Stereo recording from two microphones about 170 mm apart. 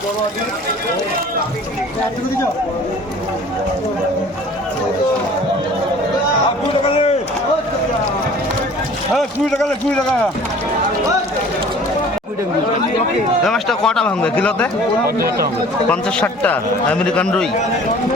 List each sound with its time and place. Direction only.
9.1 s speech: centre (ahead or behind)
13.4 s speech: centre (ahead or behind)
15.0 s speech: 60° right (ahead or behind)
15.9 s a man's voice: 10° left (ahead or behind)